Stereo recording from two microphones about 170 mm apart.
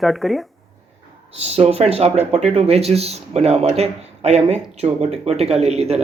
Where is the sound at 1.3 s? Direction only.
40° right (ahead or behind).